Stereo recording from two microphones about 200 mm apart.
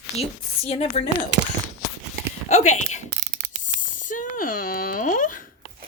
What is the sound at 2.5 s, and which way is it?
Speech, 35° left (ahead or behind).